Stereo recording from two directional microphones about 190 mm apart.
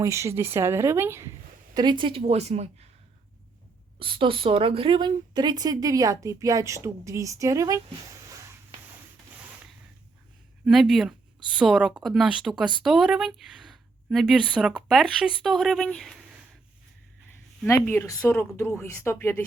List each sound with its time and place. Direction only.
0.0 s a woman's voice: 15° right (ahead or behind); by 2.6 s 35° right (ahead or behind)
4.0 s a woman's voice: 25° right (ahead or behind)
10.7 s a woman's voice: centre (ahead or behind)
17.6 s speech: 10° left (ahead or behind)